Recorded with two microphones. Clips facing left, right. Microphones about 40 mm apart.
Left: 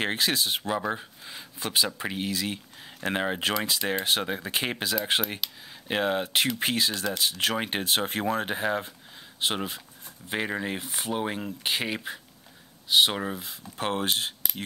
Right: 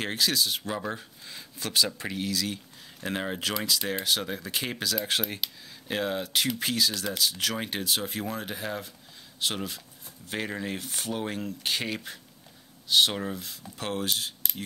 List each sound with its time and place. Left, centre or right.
0.0 s speech: left
0.7 s speech: centre
5.4 s speech: centre
5.9 s speech: left